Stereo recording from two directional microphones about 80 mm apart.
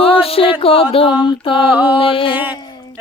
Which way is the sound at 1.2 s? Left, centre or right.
Left.